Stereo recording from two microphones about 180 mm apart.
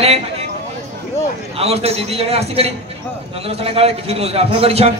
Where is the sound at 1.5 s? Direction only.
35° right (ahead or behind).